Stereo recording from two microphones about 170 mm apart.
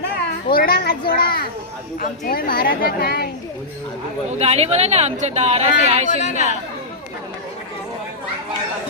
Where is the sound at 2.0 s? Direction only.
55° left (ahead or behind).